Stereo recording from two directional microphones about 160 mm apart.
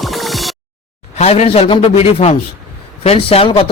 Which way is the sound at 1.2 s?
40° left (ahead or behind).